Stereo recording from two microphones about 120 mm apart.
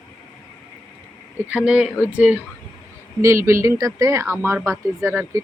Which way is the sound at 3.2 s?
25° right (ahead or behind).